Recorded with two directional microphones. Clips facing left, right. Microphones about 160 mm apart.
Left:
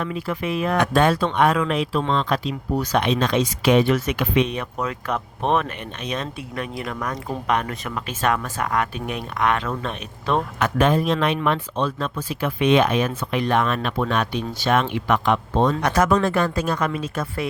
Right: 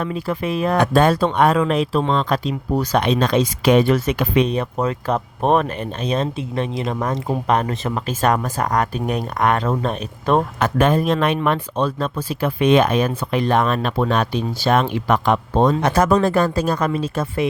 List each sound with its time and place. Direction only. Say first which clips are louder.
0.0 s speech: right 3 dB; 35° right (ahead or behind)
15.8 s speech: right 3 dB; 30° right (ahead or behind)